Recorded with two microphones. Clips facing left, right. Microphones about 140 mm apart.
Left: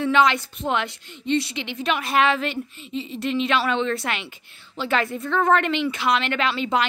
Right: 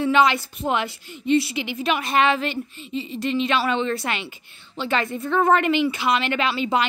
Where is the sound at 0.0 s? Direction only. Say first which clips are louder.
Right 1 dB; 5° right (ahead or behind).